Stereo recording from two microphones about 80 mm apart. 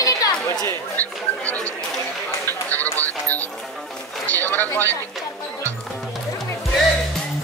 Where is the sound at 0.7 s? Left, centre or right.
Left.